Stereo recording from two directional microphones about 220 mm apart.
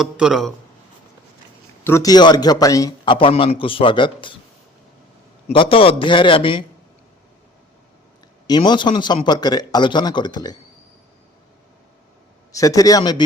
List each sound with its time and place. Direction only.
0.0 s speech: centre (ahead or behind)
1.8 s a man's voice: 15° left (ahead or behind)
5.5 s a man's voice: 25° left (ahead or behind)
8.4 s a man's voice: 20° left (ahead or behind)
12.5 s a man's voice: 15° left (ahead or behind)